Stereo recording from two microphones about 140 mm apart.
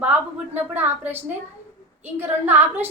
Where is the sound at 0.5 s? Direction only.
15° right (ahead or behind).